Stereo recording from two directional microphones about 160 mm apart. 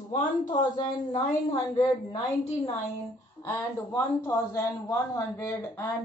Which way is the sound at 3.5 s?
10° left (ahead or behind).